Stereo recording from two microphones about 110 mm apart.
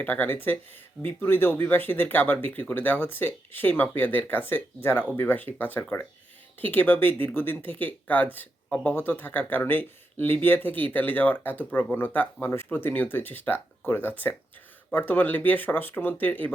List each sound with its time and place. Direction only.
0.0 s speech: 15° left (ahead or behind)